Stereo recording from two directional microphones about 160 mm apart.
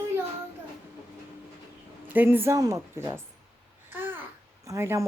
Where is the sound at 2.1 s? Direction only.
15° right (ahead or behind).